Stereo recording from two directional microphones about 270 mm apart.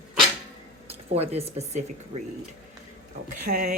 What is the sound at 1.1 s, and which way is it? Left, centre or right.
Speech, right.